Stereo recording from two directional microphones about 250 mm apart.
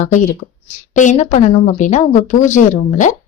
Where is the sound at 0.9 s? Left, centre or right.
Left.